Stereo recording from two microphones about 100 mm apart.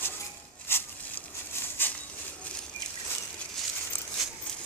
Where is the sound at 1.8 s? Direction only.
20° left (ahead or behind).